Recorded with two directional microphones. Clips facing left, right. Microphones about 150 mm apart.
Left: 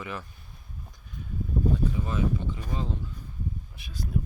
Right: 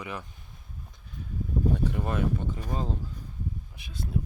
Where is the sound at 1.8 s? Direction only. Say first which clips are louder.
Even; 60° right (ahead or behind); by 3.1 s 40° right (ahead or behind).